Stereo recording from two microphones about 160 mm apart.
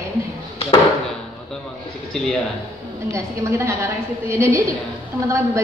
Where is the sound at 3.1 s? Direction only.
20° right (ahead or behind).